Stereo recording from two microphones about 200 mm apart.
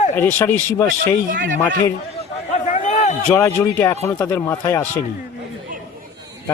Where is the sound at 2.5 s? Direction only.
35° left (ahead or behind).